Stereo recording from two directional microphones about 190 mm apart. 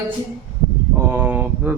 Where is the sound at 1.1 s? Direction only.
10° right (ahead or behind).